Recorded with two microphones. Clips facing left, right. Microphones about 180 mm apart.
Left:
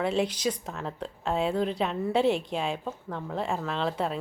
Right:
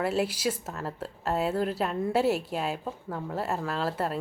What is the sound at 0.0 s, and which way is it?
A woman's voice, 5° right (ahead or behind).